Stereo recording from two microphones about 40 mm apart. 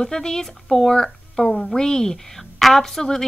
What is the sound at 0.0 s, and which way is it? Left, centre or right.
A woman's voice, centre.